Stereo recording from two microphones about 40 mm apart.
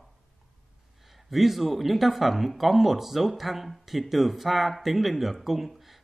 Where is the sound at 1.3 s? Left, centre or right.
Centre.